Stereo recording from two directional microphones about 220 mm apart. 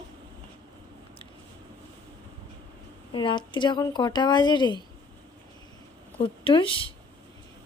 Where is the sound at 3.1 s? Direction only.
20° left (ahead or behind).